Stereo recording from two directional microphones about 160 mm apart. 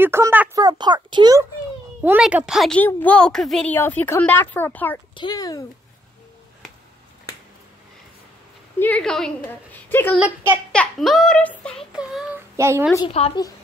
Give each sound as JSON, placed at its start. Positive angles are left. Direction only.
{"t": 0.0, "sound": "speech", "side_deg": -15}
{"t": 0.6, "sound": "a child's voice", "side_deg": -25}
{"t": 2.0, "sound": "a child's voice", "side_deg": -10}
{"t": 2.8, "sound": "a woman's voice", "side_deg": 10}
{"t": 5.1, "sound": "speech", "side_deg": 25}
{"t": 8.7, "sound": "a woman's voice", "side_deg": 10}
{"t": 10.1, "sound": "a child's voice", "side_deg": -10}
{"t": 10.7, "sound": "a child's voice", "side_deg": 5}
{"t": 11.9, "sound": "a child's voice", "side_deg": -5}
{"t": 12.4, "sound": "a child's voice", "side_deg": -15}
{"t": 13.2, "sound": "a woman's voice", "side_deg": 40}